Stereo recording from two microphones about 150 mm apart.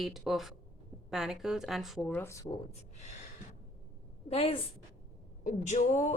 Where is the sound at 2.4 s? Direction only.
45° left (ahead or behind).